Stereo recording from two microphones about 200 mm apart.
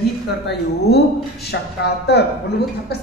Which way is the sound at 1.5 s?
60° left (ahead or behind).